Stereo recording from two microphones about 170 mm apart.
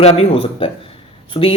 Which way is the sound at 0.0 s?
35° left (ahead or behind).